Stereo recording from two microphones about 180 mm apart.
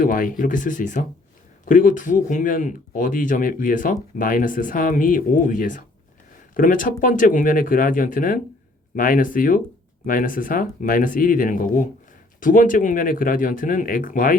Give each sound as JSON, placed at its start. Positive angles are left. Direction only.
{"t": 0.0, "sound": "speech", "side_deg": 50}